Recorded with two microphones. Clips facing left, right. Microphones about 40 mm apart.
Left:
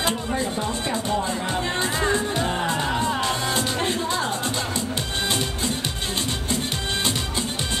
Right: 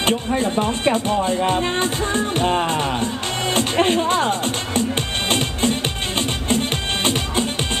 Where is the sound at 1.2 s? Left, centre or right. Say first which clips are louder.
Right 6 dB; right.